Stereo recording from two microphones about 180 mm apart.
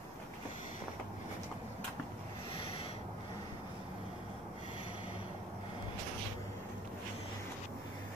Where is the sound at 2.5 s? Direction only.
30° left (ahead or behind).